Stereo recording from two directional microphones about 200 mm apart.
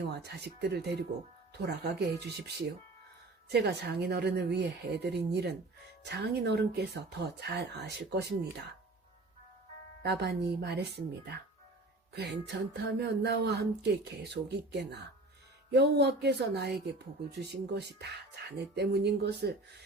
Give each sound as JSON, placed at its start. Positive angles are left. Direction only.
{"t": 0.1, "sound": "speech", "side_deg": -55}
{"t": 10.0, "sound": "speech", "side_deg": -55}